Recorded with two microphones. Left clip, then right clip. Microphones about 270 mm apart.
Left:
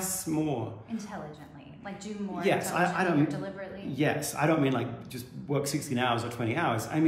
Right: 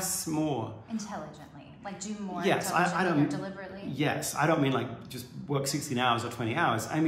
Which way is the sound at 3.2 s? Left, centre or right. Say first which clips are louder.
Left 1 dB; centre.